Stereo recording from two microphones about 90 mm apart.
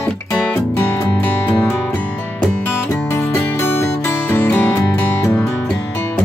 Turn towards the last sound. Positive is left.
turn(degrees=30)  # may be behind; listen again after turning